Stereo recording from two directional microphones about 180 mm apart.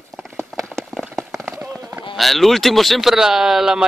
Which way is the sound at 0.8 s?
Centre (ahead or behind).